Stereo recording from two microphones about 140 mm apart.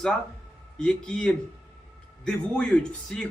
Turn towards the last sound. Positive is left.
turn(degrees=5)  # may be behind; listen again after turning